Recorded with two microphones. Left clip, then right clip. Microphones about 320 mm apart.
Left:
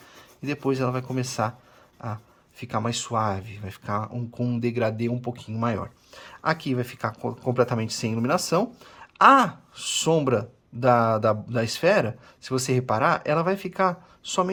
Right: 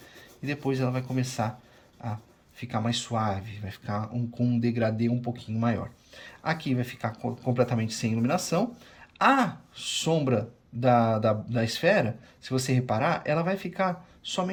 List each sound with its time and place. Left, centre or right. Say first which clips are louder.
0.4 s speech: left 4 dB; centre
2.6 s speech: left 3 dB; centre